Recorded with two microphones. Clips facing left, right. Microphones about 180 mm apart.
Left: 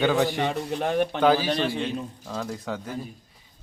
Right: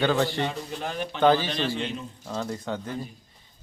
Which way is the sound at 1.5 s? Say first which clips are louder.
Left 3 dB; 50° left (ahead or behind).